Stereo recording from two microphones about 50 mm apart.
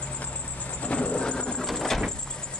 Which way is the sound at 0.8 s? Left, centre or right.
Left.